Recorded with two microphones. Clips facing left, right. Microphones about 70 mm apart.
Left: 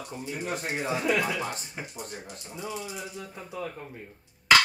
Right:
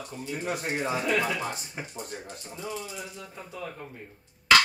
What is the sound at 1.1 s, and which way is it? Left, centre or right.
Speech, centre.